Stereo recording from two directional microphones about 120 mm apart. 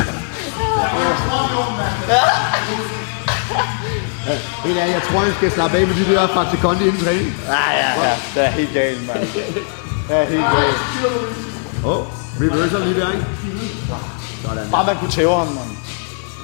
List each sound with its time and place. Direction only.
0.8 s a sound: 20° left (ahead or behind)
2.1 s chuckle: 15° left (ahead or behind)
3.2 s music: 20° left (ahead or behind)
4.3 s speech: 20° left (ahead or behind)
10.2 s speech: 20° left (ahead or behind)
12.5 s speech: 20° left (ahead or behind)
14.7 s speech: 20° left (ahead or behind)